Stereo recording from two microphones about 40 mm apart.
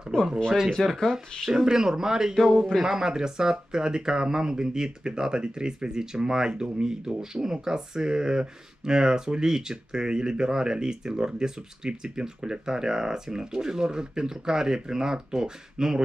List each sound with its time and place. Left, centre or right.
0.7 s speech: centre
1.5 s speech: centre
2.5 s speech: centre
2.8 s speech: centre